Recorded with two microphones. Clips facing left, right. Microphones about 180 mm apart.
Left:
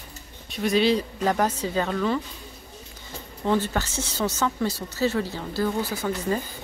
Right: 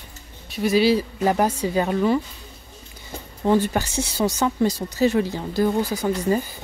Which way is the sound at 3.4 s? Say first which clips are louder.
Right 4 dB; 15° right (ahead or behind).